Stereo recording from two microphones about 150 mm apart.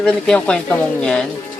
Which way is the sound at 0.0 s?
5° left (ahead or behind).